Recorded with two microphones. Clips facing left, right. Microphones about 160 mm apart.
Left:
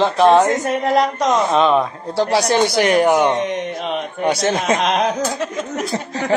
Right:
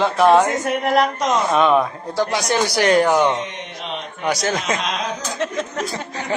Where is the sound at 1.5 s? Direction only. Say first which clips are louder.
Left 1 dB; 25° left (ahead or behind).